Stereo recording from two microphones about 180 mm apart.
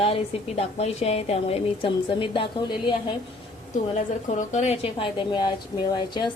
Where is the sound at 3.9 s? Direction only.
40° left (ahead or behind).